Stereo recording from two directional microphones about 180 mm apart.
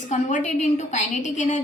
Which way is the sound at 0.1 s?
45° left (ahead or behind).